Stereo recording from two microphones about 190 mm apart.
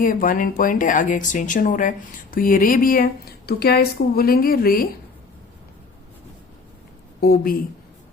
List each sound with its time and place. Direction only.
0.0 s speech: 45° left (ahead or behind)
7.2 s speech: 50° left (ahead or behind)